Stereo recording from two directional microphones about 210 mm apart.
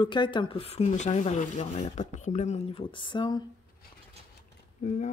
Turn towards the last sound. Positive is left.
turn(degrees=35)  # may be behind; listen again after turning